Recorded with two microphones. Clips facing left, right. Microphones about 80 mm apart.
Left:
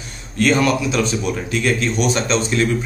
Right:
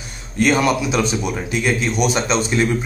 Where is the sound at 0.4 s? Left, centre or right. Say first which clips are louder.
Even; centre.